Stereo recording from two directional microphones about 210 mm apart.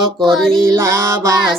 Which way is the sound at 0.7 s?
15° right (ahead or behind).